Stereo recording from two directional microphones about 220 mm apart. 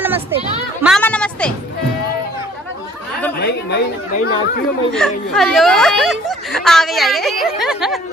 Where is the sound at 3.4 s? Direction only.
50° left (ahead or behind).